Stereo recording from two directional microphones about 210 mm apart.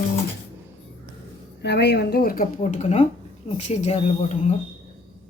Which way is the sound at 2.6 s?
35° left (ahead or behind).